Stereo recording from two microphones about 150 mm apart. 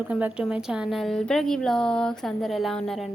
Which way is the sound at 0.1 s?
10° right (ahead or behind).